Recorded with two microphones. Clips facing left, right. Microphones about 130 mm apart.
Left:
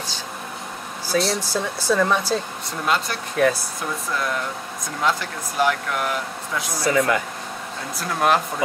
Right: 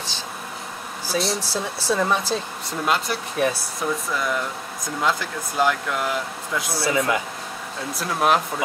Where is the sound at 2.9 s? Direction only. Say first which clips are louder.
Left 1 dB; 5° right (ahead or behind).